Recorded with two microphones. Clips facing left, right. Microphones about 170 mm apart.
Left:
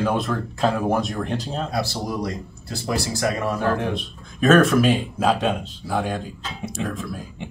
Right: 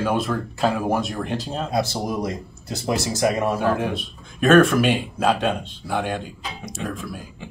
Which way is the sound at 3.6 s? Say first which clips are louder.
Right 1 dB; 5° right (ahead or behind).